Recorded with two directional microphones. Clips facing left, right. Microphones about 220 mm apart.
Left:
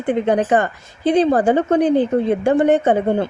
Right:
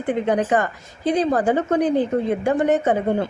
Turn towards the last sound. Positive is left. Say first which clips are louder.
# left 3 dB
turn(degrees=30)  # may be behind; listen again after turning